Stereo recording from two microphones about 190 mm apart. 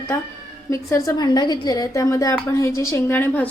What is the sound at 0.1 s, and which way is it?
A woman's voice, 15° left (ahead or behind).